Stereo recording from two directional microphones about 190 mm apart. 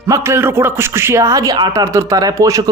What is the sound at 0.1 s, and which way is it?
A man's voice, 15° right (ahead or behind).